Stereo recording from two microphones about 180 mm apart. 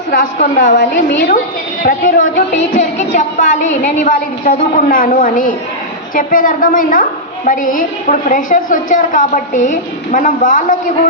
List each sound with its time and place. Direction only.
0.1 s a woman's voice: 50° left (ahead or behind)
0.8 s a woman's voice: 75° left (ahead or behind)
1.8 s a woman's voice: 50° left (ahead or behind)